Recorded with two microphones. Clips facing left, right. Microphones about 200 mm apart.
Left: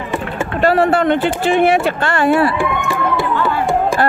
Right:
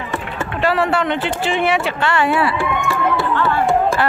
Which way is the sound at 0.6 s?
45° left (ahead or behind).